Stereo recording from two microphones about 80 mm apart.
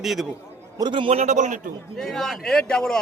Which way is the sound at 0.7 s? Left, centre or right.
Right.